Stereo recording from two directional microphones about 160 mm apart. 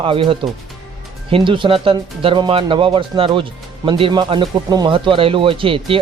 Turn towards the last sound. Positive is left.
turn(degrees=-35)  # may be behind; listen again after turning